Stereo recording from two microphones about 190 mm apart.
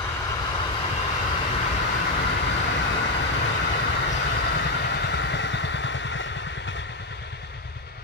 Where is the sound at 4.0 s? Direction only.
65° left (ahead or behind).